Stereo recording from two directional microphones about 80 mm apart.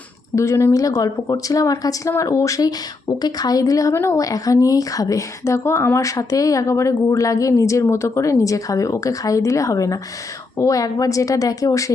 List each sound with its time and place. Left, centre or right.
0.3 s a woman's voice: left